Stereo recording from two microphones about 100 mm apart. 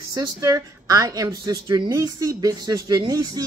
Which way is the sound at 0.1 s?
35° right (ahead or behind).